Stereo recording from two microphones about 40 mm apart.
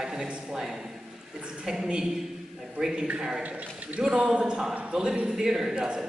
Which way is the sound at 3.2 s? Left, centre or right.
Centre.